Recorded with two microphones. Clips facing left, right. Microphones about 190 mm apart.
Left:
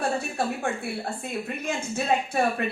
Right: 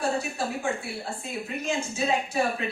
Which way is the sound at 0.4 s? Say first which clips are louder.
Left 3 dB; 60° left (ahead or behind).